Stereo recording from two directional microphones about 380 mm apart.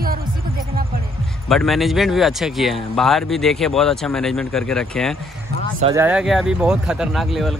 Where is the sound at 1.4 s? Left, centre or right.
Centre.